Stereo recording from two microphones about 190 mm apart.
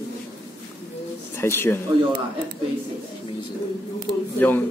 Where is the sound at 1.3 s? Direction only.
10° left (ahead or behind).